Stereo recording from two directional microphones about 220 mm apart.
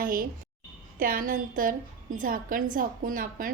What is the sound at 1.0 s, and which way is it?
A woman's voice, 40° right (ahead or behind).